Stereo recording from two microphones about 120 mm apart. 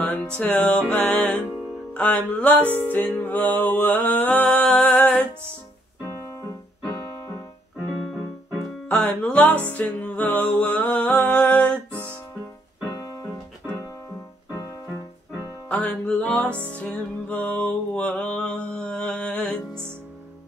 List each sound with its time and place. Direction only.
0.0 s music: 10° left (ahead or behind)
6.0 s piano: 25° left (ahead or behind)
8.8 s music: 10° left (ahead or behind)
12.9 s music: 25° left (ahead or behind)
15.7 s music: 10° left (ahead or behind)